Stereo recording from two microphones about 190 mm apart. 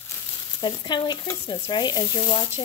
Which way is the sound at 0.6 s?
25° left (ahead or behind).